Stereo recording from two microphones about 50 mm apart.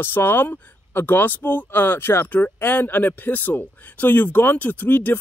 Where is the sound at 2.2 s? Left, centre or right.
Left.